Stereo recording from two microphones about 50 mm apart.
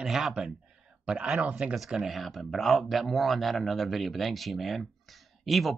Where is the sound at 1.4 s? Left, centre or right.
Right.